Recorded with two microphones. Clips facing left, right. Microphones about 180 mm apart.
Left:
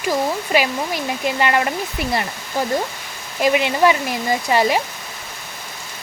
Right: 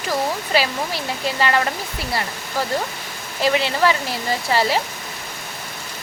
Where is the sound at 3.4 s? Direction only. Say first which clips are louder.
Left 3 dB; 15° left (ahead or behind).